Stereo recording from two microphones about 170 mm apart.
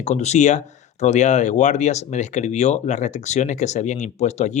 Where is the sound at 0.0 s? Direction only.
40° left (ahead or behind).